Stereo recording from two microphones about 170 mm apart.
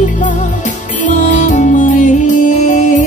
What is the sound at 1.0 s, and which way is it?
Music, 45° left (ahead or behind).